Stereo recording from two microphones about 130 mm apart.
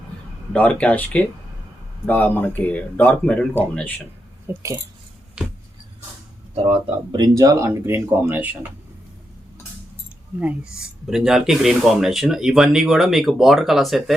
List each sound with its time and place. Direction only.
0.5 s speech: 10° left (ahead or behind)
4.4 s speech: 25° right (ahead or behind)
5.4 s a sound: 5° right (ahead or behind)
6.5 s speech: 45° right (ahead or behind); by 8.4 s 15° right (ahead or behind)
11.0 s speech: 5° right (ahead or behind)